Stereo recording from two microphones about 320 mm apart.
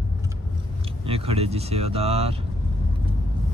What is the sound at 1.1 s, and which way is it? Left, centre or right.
Speech, centre.